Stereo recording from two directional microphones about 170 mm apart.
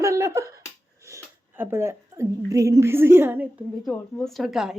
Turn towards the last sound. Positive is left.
turn(degrees=-5)  # may be behind; listen again after turning